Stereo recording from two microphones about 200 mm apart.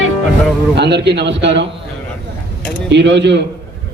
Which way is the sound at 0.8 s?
55° right (ahead or behind).